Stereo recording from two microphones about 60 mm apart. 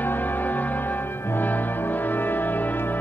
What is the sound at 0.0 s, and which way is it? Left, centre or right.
Music, left.